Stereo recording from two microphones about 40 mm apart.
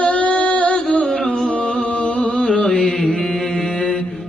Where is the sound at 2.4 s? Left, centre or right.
Left.